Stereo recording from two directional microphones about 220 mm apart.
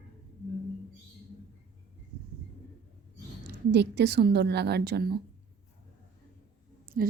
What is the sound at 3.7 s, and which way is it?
A woman's voice, 50° right (ahead or behind).